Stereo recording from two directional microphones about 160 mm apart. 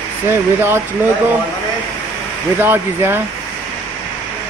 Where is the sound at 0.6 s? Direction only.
15° right (ahead or behind).